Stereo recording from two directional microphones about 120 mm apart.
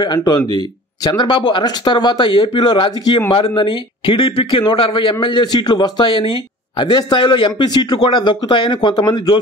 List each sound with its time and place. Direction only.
0.0 s a man's voice: 35° left (ahead or behind)